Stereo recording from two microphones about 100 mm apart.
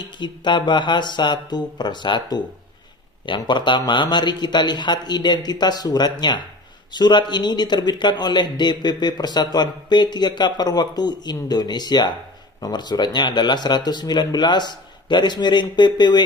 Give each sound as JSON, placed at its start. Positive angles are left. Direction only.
{"t": 0.0, "sound": "speech", "side_deg": 50}